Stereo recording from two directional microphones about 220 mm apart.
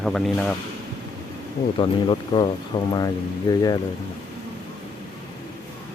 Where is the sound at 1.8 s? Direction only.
20° left (ahead or behind).